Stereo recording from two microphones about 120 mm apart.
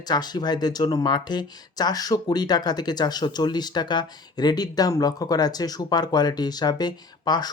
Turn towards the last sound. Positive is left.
turn(degrees=35)  # may be behind; listen again after turning